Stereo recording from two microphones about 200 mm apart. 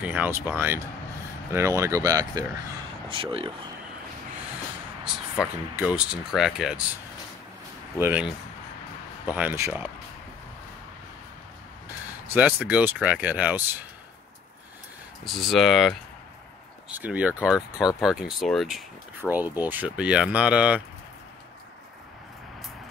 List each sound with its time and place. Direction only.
0.0 s speech: 10° right (ahead or behind); by 3.5 s 25° right (ahead or behind)
5.4 s speech: 5° right (ahead or behind)
8.0 s speech: 5° right (ahead or behind)
12.3 s speech: 5° right (ahead or behind)
15.2 s speech: centre (ahead or behind)